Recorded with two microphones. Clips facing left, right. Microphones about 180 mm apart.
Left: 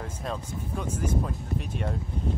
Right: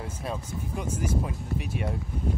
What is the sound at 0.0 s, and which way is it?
Speech, 10° right (ahead or behind).